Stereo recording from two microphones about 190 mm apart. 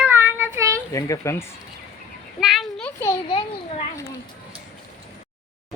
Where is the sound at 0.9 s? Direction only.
15° left (ahead or behind).